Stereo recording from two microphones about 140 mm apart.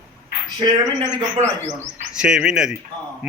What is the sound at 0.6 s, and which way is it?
Speech, 30° right (ahead or behind).